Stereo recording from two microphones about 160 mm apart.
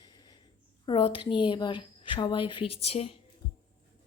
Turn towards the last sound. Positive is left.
turn(degrees=40)  # may be behind; listen again after turning